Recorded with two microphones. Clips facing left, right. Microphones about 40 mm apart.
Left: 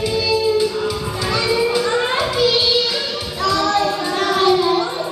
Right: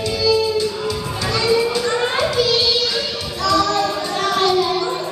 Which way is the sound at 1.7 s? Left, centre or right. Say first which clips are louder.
Left 2 dB; centre.